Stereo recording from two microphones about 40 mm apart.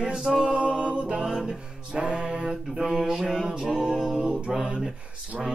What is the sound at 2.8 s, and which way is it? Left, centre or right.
Music, centre.